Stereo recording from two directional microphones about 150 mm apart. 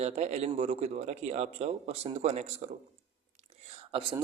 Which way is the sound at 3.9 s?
35° right (ahead or behind).